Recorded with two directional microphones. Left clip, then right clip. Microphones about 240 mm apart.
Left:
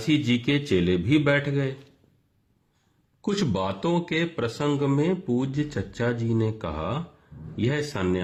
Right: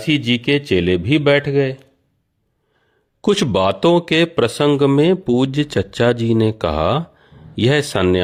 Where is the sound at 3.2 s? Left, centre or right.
Right.